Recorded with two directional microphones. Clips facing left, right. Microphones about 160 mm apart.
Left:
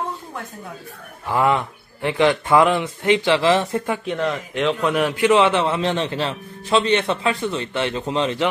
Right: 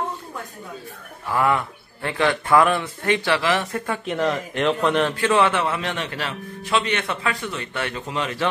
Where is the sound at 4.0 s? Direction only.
Centre (ahead or behind); by 8.4 s 25° left (ahead or behind).